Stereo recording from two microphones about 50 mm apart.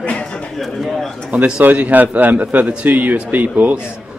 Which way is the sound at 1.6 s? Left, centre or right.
Right.